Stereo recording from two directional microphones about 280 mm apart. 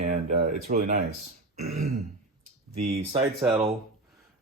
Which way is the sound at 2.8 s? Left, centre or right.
Right.